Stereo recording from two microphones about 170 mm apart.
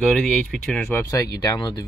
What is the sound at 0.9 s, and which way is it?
Speech, 20° left (ahead or behind).